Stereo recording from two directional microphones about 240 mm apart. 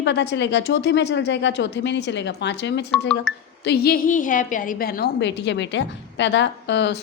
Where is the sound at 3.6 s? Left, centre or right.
Left.